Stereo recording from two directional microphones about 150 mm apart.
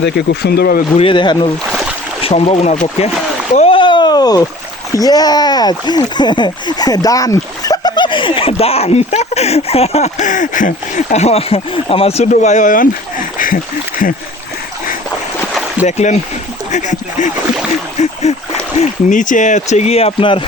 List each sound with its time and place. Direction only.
0.2 s speech: 90° left
0.9 s speech: 35° left (ahead or behind)
2.2 s speech: 45° left (ahead or behind)
3.7 s a sound: 30° left (ahead or behind)
4.9 s speech: 25° left (ahead or behind); by 13.6 s 65° left (ahead or behind)
15.9 s speech: 50° left (ahead or behind)